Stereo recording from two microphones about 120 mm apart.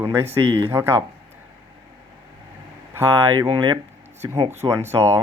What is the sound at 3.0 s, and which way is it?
Speech, 30° right (ahead or behind).